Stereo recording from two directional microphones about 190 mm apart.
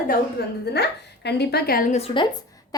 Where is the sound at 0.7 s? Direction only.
60° left (ahead or behind).